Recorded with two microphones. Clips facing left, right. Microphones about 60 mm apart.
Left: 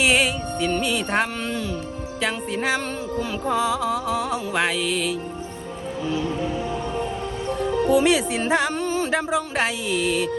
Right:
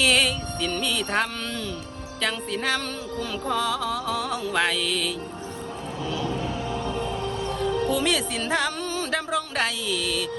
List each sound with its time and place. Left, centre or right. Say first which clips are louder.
0.0 s music: left 2 dB; centre
7.6 s speech: left 6 dB; left